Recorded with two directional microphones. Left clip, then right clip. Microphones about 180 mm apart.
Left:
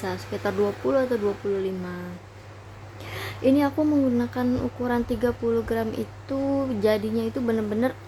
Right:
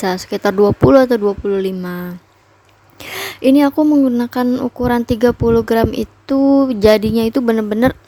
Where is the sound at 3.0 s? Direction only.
60° right (ahead or behind).